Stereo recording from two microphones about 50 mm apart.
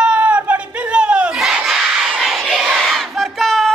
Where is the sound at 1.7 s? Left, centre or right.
Centre.